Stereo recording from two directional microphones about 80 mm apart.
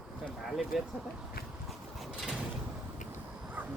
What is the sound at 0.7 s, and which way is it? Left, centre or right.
Speech, centre.